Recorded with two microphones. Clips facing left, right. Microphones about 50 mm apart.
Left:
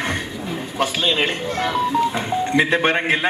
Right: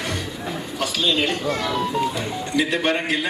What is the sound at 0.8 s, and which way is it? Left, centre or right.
A man's voice, left.